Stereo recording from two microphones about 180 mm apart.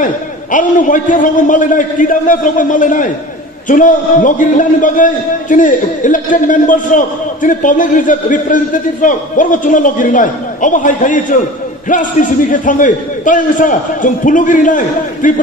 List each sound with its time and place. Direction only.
0.0 s a man's voice: 45° left (ahead or behind)